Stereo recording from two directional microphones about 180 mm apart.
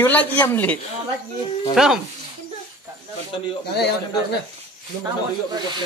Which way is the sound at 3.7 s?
65° left (ahead or behind).